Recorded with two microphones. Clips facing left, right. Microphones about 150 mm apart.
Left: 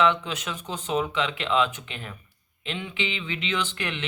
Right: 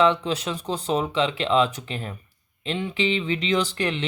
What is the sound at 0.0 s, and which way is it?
Speech, 35° right (ahead or behind).